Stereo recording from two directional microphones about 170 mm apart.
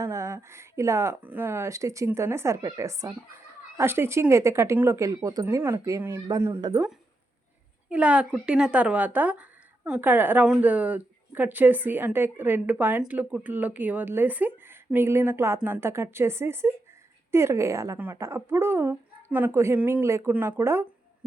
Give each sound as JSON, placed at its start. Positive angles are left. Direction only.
{"t": 0.0, "sound": "speech", "side_deg": -20}
{"t": 7.9, "sound": "speech", "side_deg": -5}